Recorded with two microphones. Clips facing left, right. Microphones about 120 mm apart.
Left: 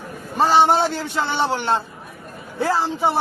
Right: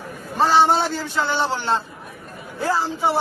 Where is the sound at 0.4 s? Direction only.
15° left (ahead or behind).